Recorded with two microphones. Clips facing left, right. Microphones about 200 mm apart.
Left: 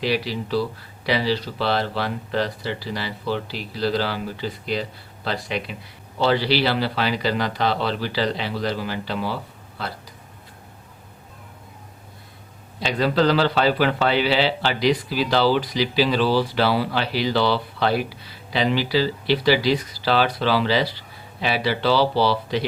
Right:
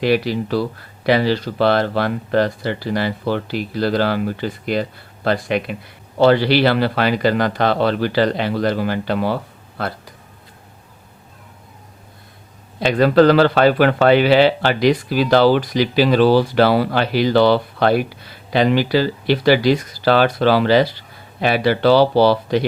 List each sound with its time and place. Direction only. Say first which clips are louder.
0.0 s speech: right 7 dB; 55° right (ahead or behind)
12.8 s speech: right 8 dB; 55° right (ahead or behind)